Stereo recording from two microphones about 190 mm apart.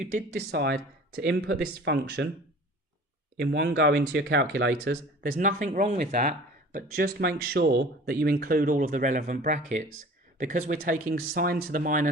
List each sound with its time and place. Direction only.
0.5 s speech: 60° right (ahead or behind)
3.3 s speech: 70° right (ahead or behind); by 6.3 s 40° right (ahead or behind)
6.7 s speech: 55° right (ahead or behind)